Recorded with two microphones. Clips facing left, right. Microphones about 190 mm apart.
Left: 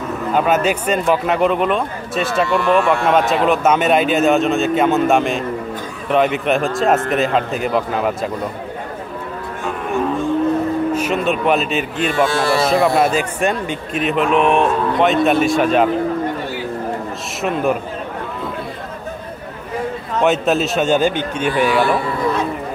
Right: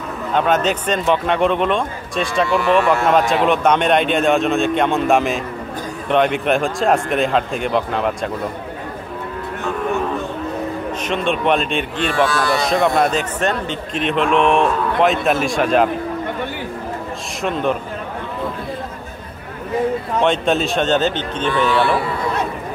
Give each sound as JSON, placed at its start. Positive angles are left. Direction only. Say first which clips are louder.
{"t": 0.3, "sound": "speech", "louder": "left 1 dB", "side_deg": 5}
{"t": 10.9, "sound": "speech", "louder": "left 3 dB", "side_deg": 5}
{"t": 12.3, "sound": "speech", "louder": "left 2 dB", "side_deg": 25}
{"t": 12.6, "sound": "speech", "louder": "left 1 dB", "side_deg": 5}
{"t": 17.4, "sound": "speech", "louder": "left 2 dB", "side_deg": 5}
{"t": 20.2, "sound": "a man's voice", "louder": "left 2 dB", "side_deg": 5}